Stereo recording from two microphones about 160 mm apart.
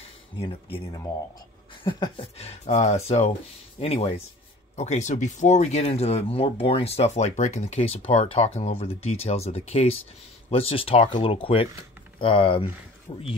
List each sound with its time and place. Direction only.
0.4 s speech: 35° left (ahead or behind)
1.9 s speech: 30° left (ahead or behind)